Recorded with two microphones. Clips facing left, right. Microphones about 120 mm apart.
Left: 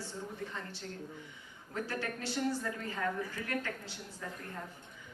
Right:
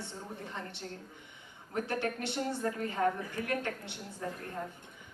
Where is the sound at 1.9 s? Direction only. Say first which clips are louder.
Right 5 dB; 25° right (ahead or behind).